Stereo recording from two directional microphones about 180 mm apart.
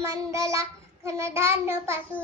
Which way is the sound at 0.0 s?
15° right (ahead or behind).